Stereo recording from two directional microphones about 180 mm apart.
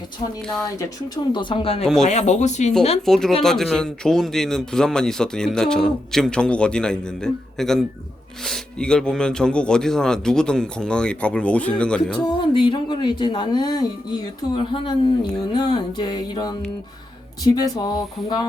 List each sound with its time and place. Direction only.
0.4 s speech: 5° left (ahead or behind)
0.8 s speech: 20° left (ahead or behind)
2.0 s speech: 40° left (ahead or behind)
3.1 s speech: centre (ahead or behind)
12.4 s speech: 25° left (ahead or behind)